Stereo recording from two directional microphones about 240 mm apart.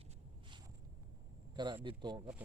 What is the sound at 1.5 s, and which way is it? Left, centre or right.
Speech, centre.